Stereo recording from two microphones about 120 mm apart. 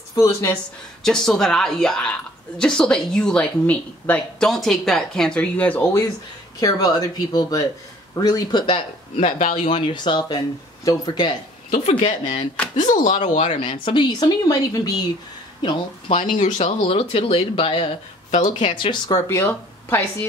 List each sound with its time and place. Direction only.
0.1 s speech: 25° left (ahead or behind)
1.0 s speech: 5° left (ahead or behind)
4.5 s speech: centre (ahead or behind)
6.6 s speech: 30° left (ahead or behind)
9.2 s speech: 90° left
9.7 s speech: 50° left (ahead or behind)
12.0 s speech: 70° left (ahead or behind)
12.8 s speech: 90° left; by 13.7 s 70° left (ahead or behind)
13.7 s speech: 40° left (ahead or behind)
18.3 s speech: 80° left
18.7 s speech: 40° left (ahead or behind)
19.2 s speech: 20° left (ahead or behind)